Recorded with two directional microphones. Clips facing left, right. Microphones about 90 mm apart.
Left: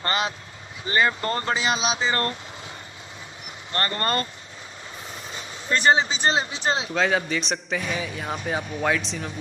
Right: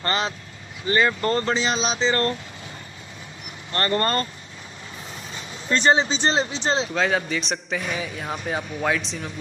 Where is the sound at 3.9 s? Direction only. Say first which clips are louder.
Right 5 dB; 35° right (ahead or behind).